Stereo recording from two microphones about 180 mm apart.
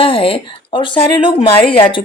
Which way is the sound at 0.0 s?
30° left (ahead or behind).